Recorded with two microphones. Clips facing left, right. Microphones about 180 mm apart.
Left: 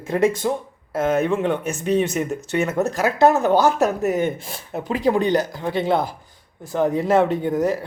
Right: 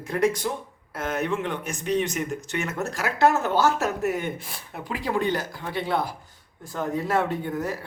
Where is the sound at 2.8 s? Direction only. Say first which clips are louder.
Left 5 dB; 20° left (ahead or behind).